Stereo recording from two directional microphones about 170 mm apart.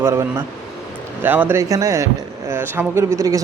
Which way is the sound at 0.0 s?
15° right (ahead or behind).